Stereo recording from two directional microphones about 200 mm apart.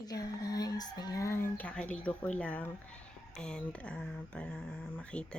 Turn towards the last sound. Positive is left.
turn(degrees=5)  # may be behind; listen again after turning